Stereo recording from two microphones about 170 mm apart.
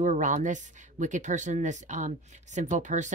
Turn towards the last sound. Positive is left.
turn(degrees=-45)  # may be behind; listen again after turning